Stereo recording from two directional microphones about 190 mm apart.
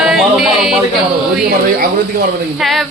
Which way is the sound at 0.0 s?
Centre (ahead or behind).